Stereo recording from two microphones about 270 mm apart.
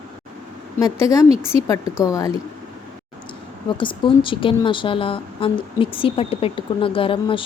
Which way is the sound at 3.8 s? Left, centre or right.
Centre.